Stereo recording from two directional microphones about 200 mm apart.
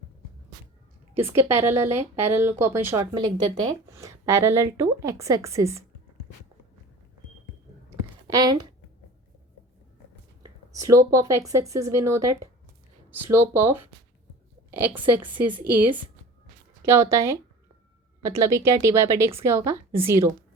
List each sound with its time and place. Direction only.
1.1 s speech: 10° right (ahead or behind)
7.9 s a sound: 20° right (ahead or behind)
10.4 s speech: 15° right (ahead or behind)
14.9 s speech: 10° right (ahead or behind)
16.8 s speech: 15° right (ahead or behind)